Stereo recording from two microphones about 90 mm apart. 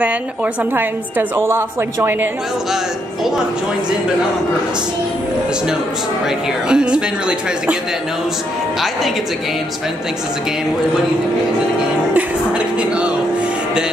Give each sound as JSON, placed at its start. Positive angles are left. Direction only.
{"t": 0.7, "sound": "a woman's voice", "side_deg": -25}
{"t": 6.2, "sound": "a woman's voice", "side_deg": -10}
{"t": 12.1, "sound": "a woman's voice", "side_deg": -15}